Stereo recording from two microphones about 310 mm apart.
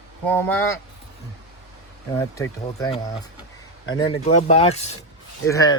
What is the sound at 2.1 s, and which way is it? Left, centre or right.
A man's voice, centre.